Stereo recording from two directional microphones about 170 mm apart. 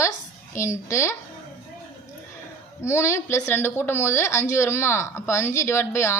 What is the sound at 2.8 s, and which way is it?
A woman's voice, 15° left (ahead or behind).